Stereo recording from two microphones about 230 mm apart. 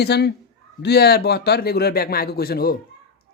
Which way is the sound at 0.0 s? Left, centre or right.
Left.